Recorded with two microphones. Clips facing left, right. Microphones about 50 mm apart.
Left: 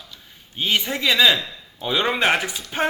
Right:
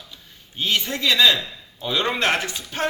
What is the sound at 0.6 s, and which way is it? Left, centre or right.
A man's voice, centre.